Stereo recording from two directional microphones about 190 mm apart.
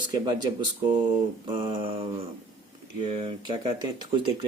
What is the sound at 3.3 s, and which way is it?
Speech, 20° right (ahead or behind).